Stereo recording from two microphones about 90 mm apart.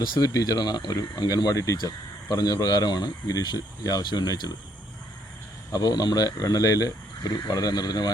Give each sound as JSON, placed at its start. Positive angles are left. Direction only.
{"t": 0.0, "sound": "speech", "side_deg": 55}
{"t": 0.3, "sound": "speech", "side_deg": 45}
{"t": 5.7, "sound": "speech", "side_deg": 45}